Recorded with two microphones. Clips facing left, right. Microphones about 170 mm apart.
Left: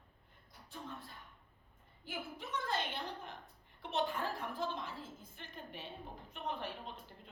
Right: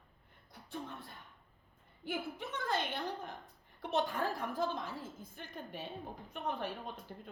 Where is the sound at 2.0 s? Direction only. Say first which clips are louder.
Right 5 dB; 55° right (ahead or behind).